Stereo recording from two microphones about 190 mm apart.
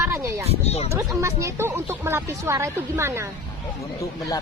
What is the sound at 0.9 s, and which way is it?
Speech, 15° right (ahead or behind).